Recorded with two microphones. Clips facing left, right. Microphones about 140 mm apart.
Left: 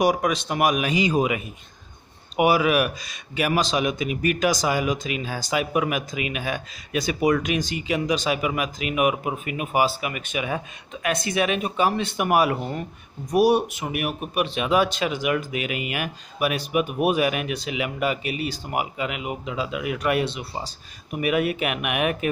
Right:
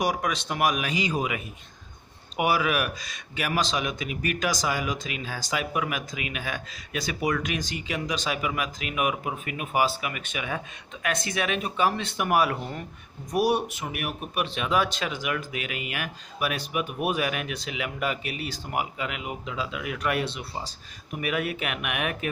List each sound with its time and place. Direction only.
0.0 s a man's voice: 15° left (ahead or behind)